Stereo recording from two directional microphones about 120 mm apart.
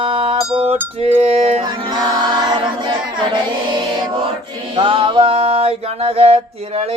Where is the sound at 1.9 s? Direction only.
35° right (ahead or behind).